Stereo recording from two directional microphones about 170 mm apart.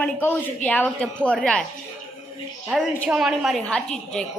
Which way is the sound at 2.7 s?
Centre (ahead or behind).